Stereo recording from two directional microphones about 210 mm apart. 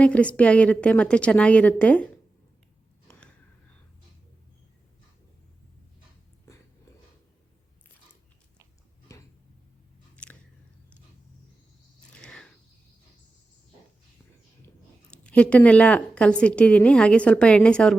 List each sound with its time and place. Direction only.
0.0 s a woman's voice: 5° left (ahead or behind)
3.1 s a sound: 5° left (ahead or behind)
9.1 s tick-tock: 15° left (ahead or behind)
10.2 s biting: 5° left (ahead or behind)
12.1 s a sound: 5° left (ahead or behind)
14.6 s speech: 5° left (ahead or behind)